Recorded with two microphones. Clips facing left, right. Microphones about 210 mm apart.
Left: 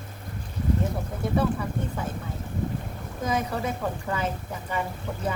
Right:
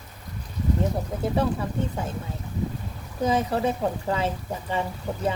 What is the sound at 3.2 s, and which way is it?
Speech, 30° right (ahead or behind).